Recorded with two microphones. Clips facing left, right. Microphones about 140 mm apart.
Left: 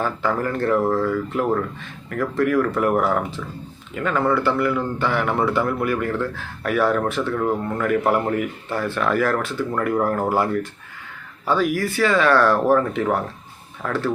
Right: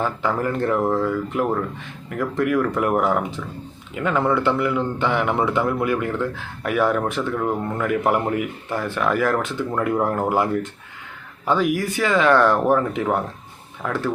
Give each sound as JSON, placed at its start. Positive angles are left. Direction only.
{"t": 0.0, "sound": "a man's voice", "side_deg": -15}